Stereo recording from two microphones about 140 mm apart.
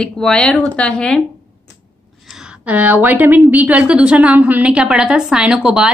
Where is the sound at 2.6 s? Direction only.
10° right (ahead or behind).